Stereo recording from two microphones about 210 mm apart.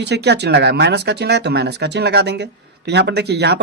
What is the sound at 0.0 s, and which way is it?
Speech, 50° right (ahead or behind).